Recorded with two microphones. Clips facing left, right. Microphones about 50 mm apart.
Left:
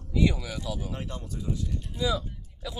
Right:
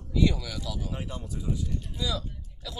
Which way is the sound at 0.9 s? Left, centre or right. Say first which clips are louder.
Even; centre.